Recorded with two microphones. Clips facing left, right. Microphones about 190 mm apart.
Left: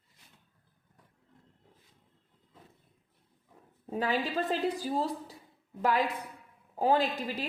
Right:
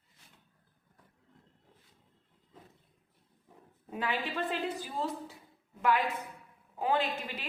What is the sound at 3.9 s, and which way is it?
A woman's voice, 40° left (ahead or behind).